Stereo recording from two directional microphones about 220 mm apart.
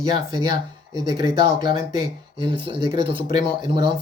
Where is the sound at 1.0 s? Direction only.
20° right (ahead or behind).